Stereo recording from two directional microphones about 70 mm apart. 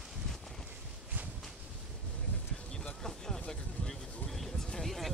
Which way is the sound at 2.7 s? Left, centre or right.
Centre.